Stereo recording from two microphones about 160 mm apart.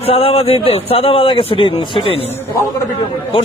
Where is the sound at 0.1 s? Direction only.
35° left (ahead or behind).